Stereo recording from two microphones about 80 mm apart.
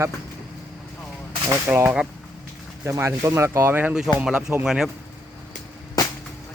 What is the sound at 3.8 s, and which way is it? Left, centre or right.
Speech, centre.